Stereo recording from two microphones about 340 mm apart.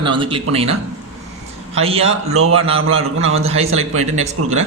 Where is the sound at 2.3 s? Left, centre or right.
Right.